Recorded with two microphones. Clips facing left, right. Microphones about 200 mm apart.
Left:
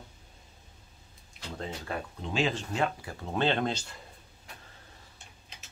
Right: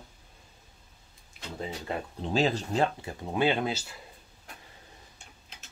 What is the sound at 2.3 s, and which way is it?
Speech, 40° right (ahead or behind).